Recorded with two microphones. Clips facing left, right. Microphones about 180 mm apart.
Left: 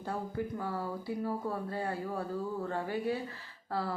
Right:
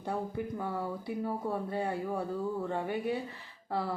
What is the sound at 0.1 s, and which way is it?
Speech, 20° right (ahead or behind).